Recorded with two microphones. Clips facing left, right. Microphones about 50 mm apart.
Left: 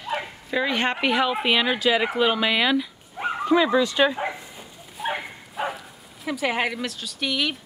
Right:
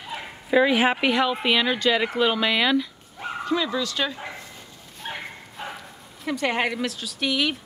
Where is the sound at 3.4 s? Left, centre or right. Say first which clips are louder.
Left 6 dB; left.